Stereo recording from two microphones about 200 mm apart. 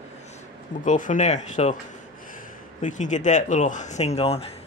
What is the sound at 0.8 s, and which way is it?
Speech, 40° left (ahead or behind).